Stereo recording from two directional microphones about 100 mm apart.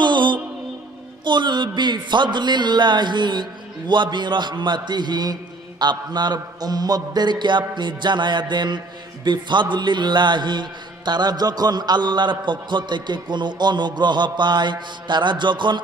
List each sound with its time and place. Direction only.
0.0 s music: 50° right (ahead or behind)
1.2 s speech: 50° right (ahead or behind)